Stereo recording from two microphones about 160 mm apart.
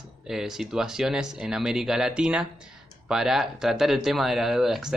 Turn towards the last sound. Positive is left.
turn(degrees=0)  # may be behind; listen again after turning